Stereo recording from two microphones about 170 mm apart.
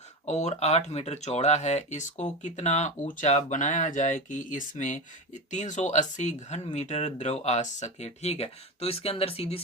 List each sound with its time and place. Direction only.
0.3 s speech: 40° left (ahead or behind)